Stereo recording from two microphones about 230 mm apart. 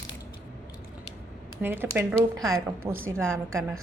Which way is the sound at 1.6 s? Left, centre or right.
Centre.